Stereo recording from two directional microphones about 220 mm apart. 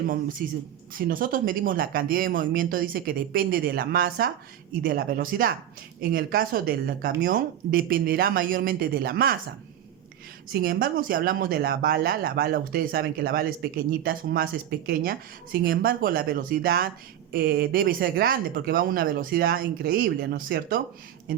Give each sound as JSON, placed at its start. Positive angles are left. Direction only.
{"t": 0.4, "sound": "speech", "side_deg": -45}
{"t": 10.5, "sound": "speech", "side_deg": -40}